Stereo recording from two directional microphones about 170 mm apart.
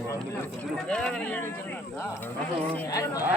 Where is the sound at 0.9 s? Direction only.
5° left (ahead or behind).